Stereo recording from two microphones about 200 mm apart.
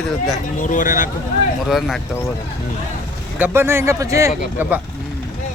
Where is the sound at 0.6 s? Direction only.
40° left (ahead or behind).